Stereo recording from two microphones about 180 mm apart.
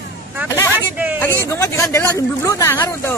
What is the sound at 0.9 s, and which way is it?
Hubbub, 10° right (ahead or behind).